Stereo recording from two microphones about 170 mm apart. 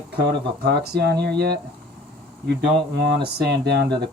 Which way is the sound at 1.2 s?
75° right (ahead or behind).